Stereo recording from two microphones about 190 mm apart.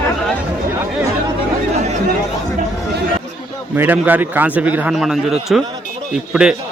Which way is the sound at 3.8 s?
10° right (ahead or behind).